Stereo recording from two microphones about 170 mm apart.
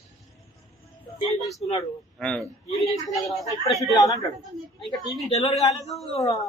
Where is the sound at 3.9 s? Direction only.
20° left (ahead or behind).